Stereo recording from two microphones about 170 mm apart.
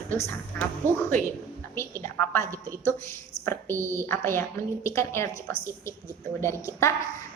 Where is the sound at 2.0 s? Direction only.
15° left (ahead or behind).